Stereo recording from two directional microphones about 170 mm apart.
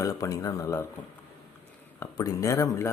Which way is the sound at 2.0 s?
20° left (ahead or behind).